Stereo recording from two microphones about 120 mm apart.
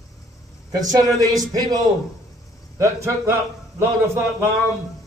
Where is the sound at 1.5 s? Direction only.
30° right (ahead or behind).